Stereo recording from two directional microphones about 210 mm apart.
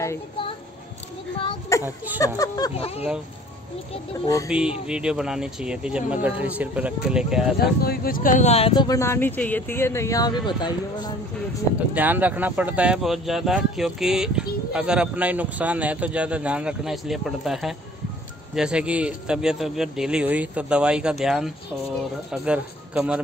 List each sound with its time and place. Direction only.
1.7 s a sound: 15° left (ahead or behind)
2.2 s speech: 15° left (ahead or behind)
4.5 s speech: 5° right (ahead or behind)
7.8 s speech: 45° left (ahead or behind); by 11.1 s 20° left (ahead or behind)
11.9 s speech: 10° right (ahead or behind)